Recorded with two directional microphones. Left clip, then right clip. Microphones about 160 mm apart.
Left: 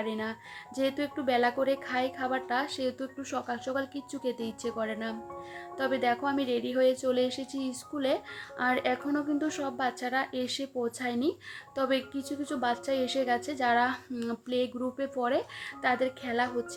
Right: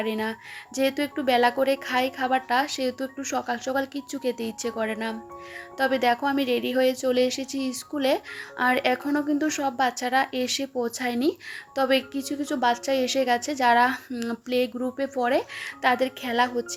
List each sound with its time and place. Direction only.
0.0 s speech: 20° right (ahead or behind)